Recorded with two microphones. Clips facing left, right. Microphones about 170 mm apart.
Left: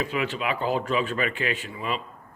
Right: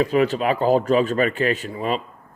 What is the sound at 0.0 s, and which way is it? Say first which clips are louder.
Speech: right 9 dB; 40° right (ahead or behind).